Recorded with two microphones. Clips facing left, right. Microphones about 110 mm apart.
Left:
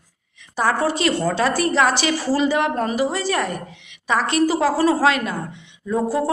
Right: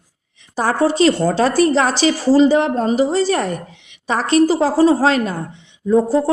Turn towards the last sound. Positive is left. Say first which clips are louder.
# right 6 dB
turn(degrees=-30)  # may be behind; listen again after turning